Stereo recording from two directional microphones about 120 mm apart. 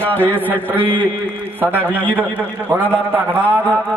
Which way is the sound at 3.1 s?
15° right (ahead or behind).